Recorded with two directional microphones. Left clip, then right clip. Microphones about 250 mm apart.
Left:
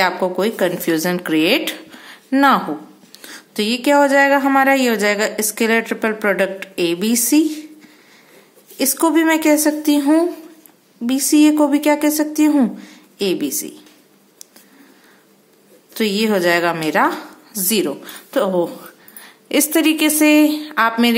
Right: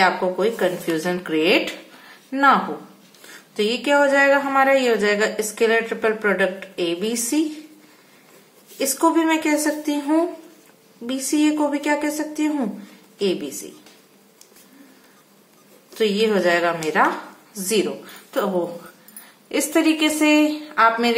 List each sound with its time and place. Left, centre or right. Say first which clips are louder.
0.0 s speech: left 1 dB; left
8.7 s speech: left 3 dB; left
15.9 s speech: left 1 dB; left
19.5 s speech: left 3 dB; left